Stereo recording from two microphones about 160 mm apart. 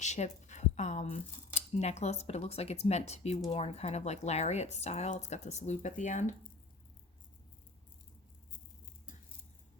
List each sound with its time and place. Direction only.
0.0 s speech: 45° left (ahead or behind)